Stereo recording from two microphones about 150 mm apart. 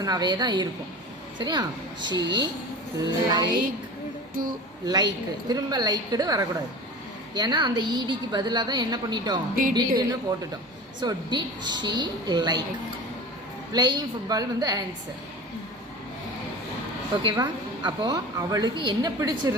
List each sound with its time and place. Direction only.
0.0 s a woman's voice: 25° right (ahead or behind)
4.4 s a sound: 65° right (ahead or behind)
4.9 s a woman's voice: 25° right (ahead or behind)
13.7 s a woman's voice: 25° right (ahead or behind)
17.2 s a woman's voice: 30° right (ahead or behind)